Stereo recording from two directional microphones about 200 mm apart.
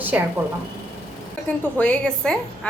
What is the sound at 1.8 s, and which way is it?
Speech, 5° left (ahead or behind).